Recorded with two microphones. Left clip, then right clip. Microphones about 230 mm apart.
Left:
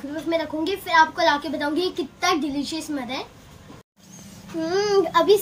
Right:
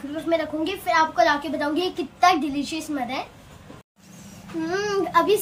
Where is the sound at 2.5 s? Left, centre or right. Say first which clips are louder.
Even; centre.